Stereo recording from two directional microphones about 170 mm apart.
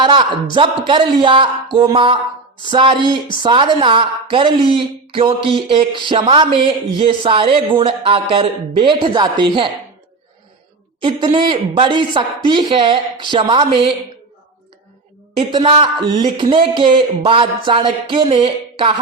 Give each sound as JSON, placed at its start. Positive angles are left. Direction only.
{"t": 0.0, "sound": "a sound", "side_deg": -25}
{"t": 0.5, "sound": "a woman's voice", "side_deg": -30}
{"t": 11.0, "sound": "a woman's voice", "side_deg": -30}
{"t": 15.4, "sound": "a woman's voice", "side_deg": -30}